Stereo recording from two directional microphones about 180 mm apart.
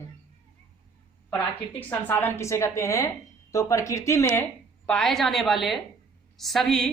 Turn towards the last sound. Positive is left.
turn(degrees=5)  # may be behind; listen again after turning